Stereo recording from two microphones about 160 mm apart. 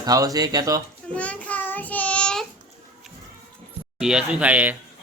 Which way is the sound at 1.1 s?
10° left (ahead or behind).